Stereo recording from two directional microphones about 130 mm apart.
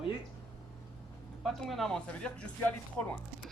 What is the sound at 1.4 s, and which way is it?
Speech, centre (ahead or behind).